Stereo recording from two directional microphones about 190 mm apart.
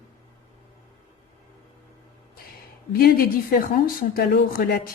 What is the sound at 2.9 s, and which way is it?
A woman's voice, 50° left (ahead or behind).